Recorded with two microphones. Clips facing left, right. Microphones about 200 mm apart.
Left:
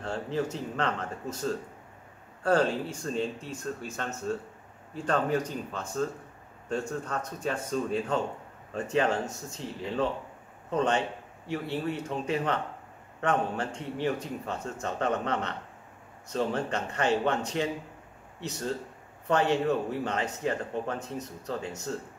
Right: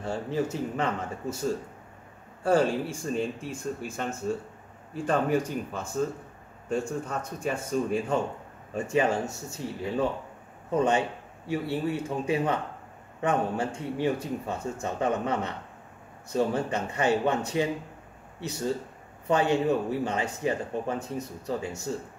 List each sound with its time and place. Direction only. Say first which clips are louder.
0.0 s speech: right 2 dB; 10° right (ahead or behind)